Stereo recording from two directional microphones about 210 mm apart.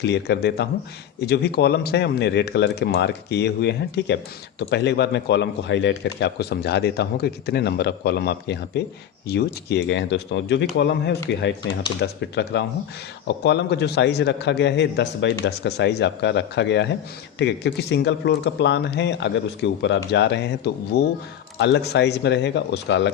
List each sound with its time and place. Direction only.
0.0 s a man's voice: 55° left (ahead or behind)